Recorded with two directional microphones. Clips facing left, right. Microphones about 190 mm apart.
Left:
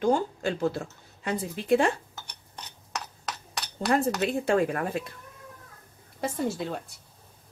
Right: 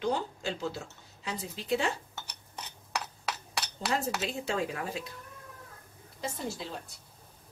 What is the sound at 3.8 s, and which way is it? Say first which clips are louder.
Speech: left 8 dB; 55° left (ahead or behind).